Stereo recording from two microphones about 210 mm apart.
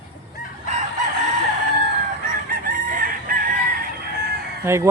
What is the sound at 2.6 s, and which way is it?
Chicken, 40° right (ahead or behind).